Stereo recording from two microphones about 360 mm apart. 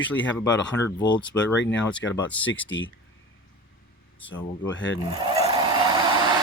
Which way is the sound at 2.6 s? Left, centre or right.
Left.